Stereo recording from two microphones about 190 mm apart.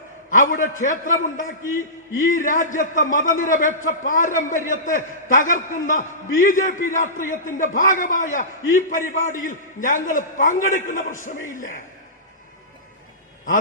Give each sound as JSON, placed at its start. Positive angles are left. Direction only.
{"t": 0.3, "sound": "a man's voice", "side_deg": 45}